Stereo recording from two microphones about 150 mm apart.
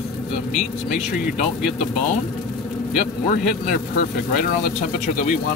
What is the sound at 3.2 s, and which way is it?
Speech, 60° left (ahead or behind).